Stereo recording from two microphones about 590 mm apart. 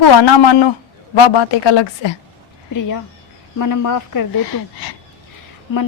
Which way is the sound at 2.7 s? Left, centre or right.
Left.